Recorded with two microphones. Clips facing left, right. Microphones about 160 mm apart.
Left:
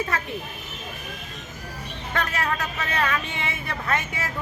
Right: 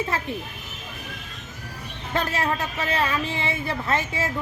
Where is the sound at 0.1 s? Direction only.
25° right (ahead or behind).